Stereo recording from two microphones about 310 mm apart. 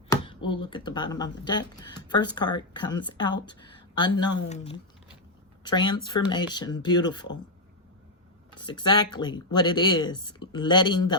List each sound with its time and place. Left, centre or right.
0.1 s speech: centre
3.9 s speech: centre
8.8 s speech: centre